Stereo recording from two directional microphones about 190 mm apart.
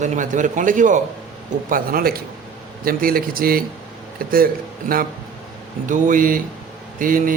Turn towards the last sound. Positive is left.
turn(degrees=-45)  # may be behind; listen again after turning